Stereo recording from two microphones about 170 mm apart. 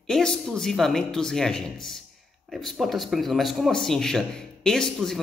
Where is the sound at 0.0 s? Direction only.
Centre (ahead or behind).